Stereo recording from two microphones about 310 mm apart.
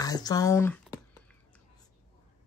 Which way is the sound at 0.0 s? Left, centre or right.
Centre.